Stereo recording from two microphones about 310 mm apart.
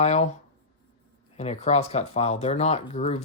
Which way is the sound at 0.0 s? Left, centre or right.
Left.